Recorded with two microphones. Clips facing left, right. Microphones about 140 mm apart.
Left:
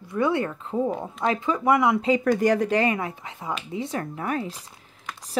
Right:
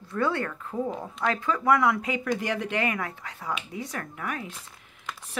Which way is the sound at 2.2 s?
45° left (ahead or behind).